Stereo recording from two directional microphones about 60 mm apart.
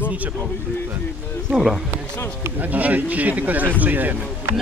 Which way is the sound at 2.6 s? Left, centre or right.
Right.